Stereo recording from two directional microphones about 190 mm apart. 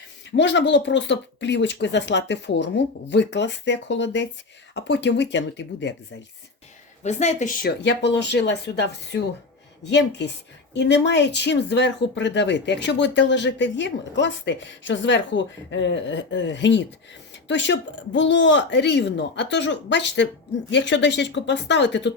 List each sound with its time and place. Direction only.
0.3 s speech: 70° left (ahead or behind)
7.0 s speech: 35° left (ahead or behind)
7.9 s speech: 65° left (ahead or behind)